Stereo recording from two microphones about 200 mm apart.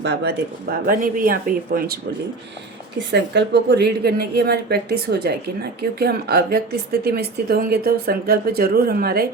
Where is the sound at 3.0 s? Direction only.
60° right (ahead or behind).